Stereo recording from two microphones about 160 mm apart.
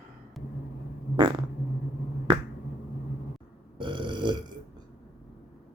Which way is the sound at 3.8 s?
30° right (ahead or behind).